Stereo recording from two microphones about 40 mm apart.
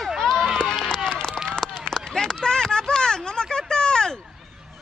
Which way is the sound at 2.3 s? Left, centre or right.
Centre.